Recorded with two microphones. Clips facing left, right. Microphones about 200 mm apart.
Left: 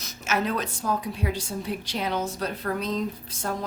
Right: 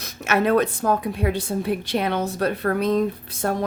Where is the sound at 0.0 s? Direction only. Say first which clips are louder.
Right 6 dB; 60° right (ahead or behind).